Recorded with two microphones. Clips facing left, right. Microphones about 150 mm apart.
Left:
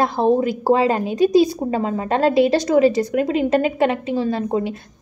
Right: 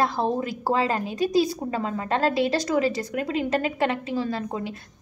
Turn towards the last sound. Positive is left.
turn(degrees=25)  # may be behind; listen again after turning